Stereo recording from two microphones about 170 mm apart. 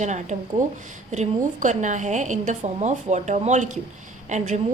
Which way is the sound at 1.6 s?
45° right (ahead or behind).